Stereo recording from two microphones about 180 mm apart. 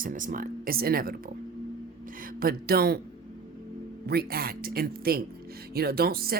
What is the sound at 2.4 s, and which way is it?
Speech, 55° right (ahead or behind).